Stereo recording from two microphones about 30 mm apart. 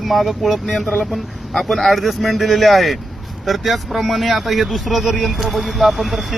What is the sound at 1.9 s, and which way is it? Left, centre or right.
Speech, centre.